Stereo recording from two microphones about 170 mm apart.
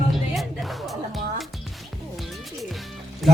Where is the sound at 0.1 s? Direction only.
Centre (ahead or behind).